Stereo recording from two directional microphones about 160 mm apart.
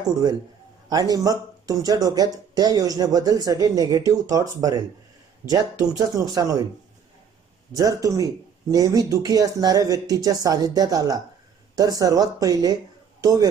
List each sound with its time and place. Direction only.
0.8 s speech: 25° right (ahead or behind)
7.7 s speech: 20° right (ahead or behind)